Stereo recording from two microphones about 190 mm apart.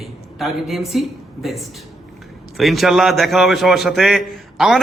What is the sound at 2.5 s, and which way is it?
A man's voice, centre (ahead or behind).